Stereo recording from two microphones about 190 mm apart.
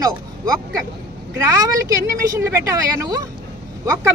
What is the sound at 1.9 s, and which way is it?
Speech, 15° right (ahead or behind).